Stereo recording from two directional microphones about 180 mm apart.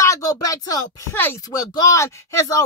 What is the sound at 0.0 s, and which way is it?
Speech, 20° left (ahead or behind).